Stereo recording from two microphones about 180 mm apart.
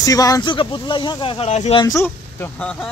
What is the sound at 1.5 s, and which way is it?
Speech, 40° left (ahead or behind).